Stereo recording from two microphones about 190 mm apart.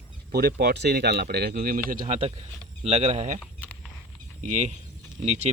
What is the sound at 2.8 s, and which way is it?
Speech, 35° right (ahead or behind).